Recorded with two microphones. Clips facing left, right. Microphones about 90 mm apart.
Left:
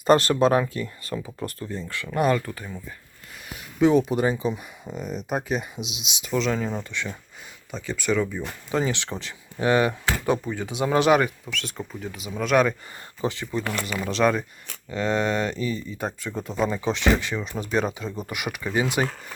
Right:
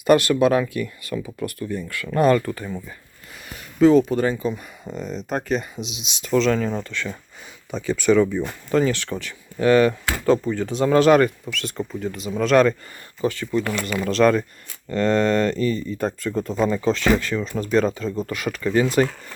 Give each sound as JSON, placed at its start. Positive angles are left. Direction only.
{"t": 0.0, "sound": "speech", "side_deg": 35}
{"t": 2.0, "sound": "speech", "side_deg": 5}
{"t": 4.9, "sound": "speech", "side_deg": 5}
{"t": 7.7, "sound": "speech", "side_deg": 0}
{"t": 8.7, "sound": "speech", "side_deg": 20}
{"t": 11.4, "sound": "speech", "side_deg": 0}
{"t": 13.2, "sound": "speech", "side_deg": 20}
{"t": 13.7, "sound": "speech", "side_deg": 5}